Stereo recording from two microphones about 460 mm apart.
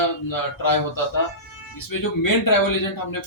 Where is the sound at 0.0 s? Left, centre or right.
Left.